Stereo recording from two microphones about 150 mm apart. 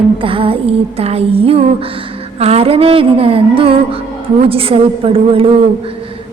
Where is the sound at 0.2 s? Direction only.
35° right (ahead or behind).